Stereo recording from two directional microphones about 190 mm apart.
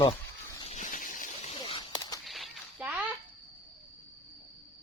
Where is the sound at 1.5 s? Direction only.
25° left (ahead or behind).